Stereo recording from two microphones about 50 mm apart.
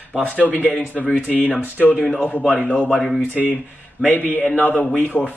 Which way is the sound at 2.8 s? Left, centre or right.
Centre.